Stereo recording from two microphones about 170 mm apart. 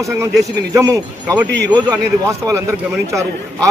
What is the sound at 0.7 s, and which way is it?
A man's voice, 20° right (ahead or behind).